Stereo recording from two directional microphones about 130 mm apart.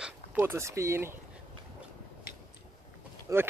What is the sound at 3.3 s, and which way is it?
Speech, 25° right (ahead or behind).